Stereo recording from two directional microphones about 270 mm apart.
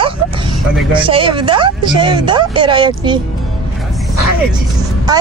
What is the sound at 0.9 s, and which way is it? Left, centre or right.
Speech, centre.